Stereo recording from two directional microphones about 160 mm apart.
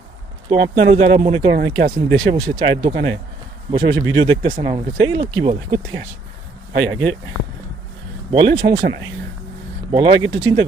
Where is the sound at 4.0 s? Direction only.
30° right (ahead or behind).